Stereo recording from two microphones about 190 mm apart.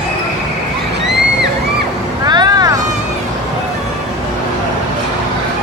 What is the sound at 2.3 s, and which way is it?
Vehicle, 20° right (ahead or behind).